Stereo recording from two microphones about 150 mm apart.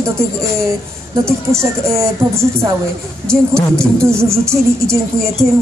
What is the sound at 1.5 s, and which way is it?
Speech, 20° right (ahead or behind).